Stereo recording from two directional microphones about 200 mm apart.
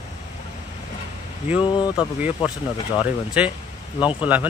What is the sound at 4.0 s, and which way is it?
Speech, 25° left (ahead or behind).